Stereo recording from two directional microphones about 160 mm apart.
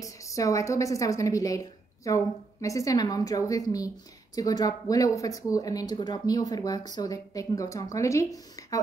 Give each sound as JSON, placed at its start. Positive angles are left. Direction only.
{"t": 0.0, "sound": "a woman's voice", "side_deg": 20}